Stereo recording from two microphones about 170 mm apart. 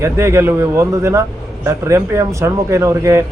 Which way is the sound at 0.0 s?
15° right (ahead or behind).